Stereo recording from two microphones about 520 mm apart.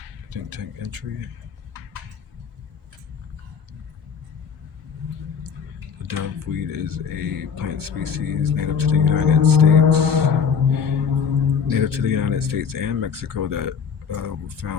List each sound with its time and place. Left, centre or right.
0.3 s speech: right
6.1 s speech: right